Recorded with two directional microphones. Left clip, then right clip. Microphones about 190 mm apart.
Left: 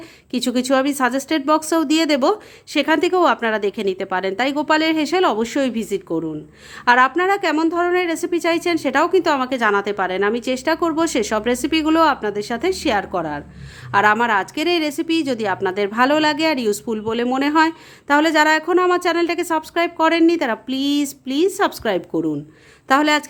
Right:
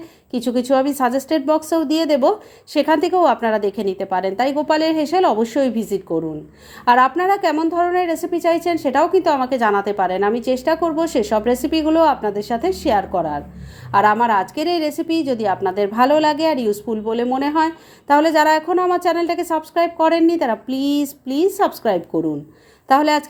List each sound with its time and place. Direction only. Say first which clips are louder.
0.3 s a woman's voice: right 1 dB; 20° left (ahead or behind)
6.1 s speech: right 2 dB; 30° left (ahead or behind)
6.8 s a woman's voice: right 1 dB; 10° left (ahead or behind)
22.1 s speech: right 1 dB; 35° left (ahead or behind)
22.9 s a woman's voice: right 1 dB; 15° left (ahead or behind)